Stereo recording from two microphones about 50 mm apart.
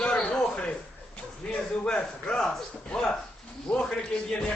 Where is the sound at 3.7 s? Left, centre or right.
Left.